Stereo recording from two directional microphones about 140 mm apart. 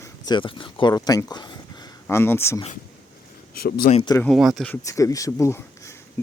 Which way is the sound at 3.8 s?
70° left (ahead or behind).